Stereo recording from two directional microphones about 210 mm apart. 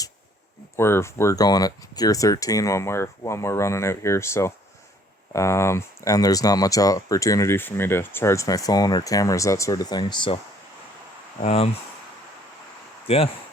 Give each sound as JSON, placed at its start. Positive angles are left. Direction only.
{"t": 0.8, "sound": "speech", "side_deg": 10}
{"t": 11.4, "sound": "speech", "side_deg": 30}
{"t": 13.1, "sound": "speech", "side_deg": 25}